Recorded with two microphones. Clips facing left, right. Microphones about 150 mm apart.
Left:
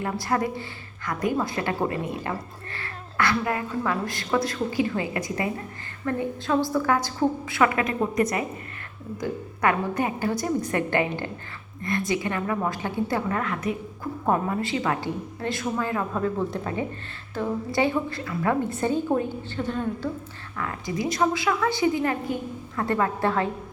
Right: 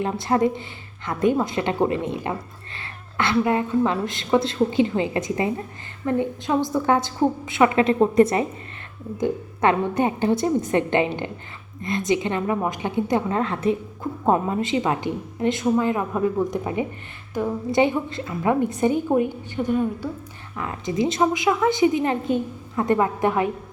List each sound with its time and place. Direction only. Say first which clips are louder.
0.0 s a woman's voice: right 5 dB; 20° right (ahead or behind)